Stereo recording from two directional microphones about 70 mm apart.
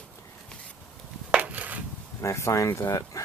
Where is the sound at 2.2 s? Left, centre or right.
Left.